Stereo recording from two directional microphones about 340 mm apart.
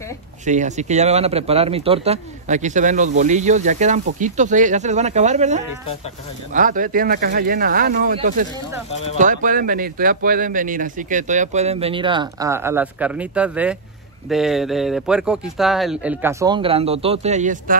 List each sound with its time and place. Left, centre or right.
0.5 s speech: right